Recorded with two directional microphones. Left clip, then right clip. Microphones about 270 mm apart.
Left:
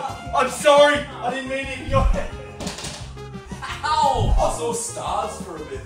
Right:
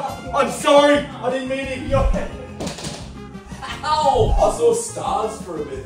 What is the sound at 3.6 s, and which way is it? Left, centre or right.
Speech, centre.